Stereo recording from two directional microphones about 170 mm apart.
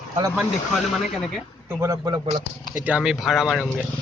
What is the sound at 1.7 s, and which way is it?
Speech, 15° right (ahead or behind).